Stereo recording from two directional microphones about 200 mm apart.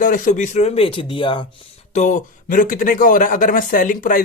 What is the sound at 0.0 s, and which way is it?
Speech, 40° left (ahead or behind).